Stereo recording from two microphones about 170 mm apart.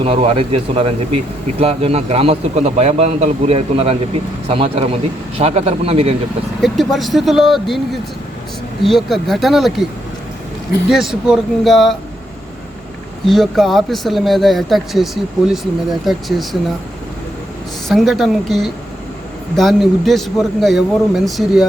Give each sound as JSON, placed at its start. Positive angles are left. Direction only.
{"t": 0.0, "sound": "a man's voice", "side_deg": -35}
{"t": 6.6, "sound": "speech", "side_deg": 0}
{"t": 8.8, "sound": "speech", "side_deg": 0}
{"t": 10.8, "sound": "speech", "side_deg": 0}
{"t": 13.2, "sound": "speech", "side_deg": 0}
{"t": 17.8, "sound": "speech", "side_deg": 0}